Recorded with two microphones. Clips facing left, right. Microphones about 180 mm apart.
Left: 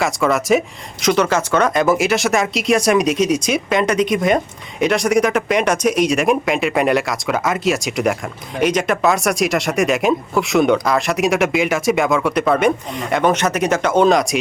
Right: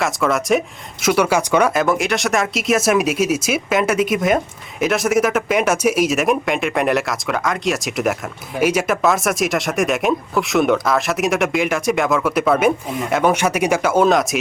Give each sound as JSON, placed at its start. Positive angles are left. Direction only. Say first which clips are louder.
{"t": 0.0, "sound": "speech", "louder": "left 1 dB", "side_deg": 0}
{"t": 1.0, "sound": "speech", "louder": "even", "side_deg": -10}